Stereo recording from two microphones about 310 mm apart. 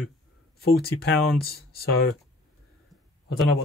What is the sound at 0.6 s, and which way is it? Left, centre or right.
Speech, left.